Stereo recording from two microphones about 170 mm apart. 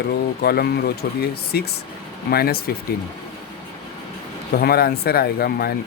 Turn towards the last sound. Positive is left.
turn(degrees=65)  # may be behind; listen again after turning